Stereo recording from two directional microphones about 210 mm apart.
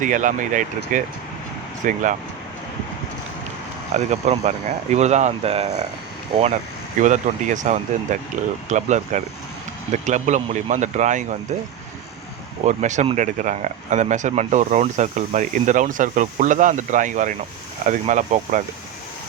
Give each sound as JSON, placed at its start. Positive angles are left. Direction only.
{"t": 0.0, "sound": "speech", "side_deg": -40}
{"t": 3.9, "sound": "speech", "side_deg": -30}
{"t": 7.0, "sound": "speech", "side_deg": -35}
{"t": 12.6, "sound": "speech", "side_deg": -35}